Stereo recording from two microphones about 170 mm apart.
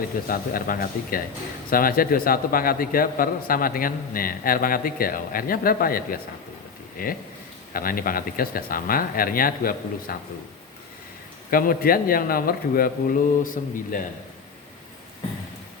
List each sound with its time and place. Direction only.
0.0 s a man's voice: 60° left (ahead or behind)
11.5 s a man's voice: 55° left (ahead or behind)